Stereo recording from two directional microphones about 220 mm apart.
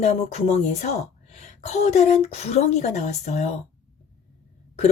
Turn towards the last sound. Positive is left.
turn(degrees=30)  # may be behind; listen again after turning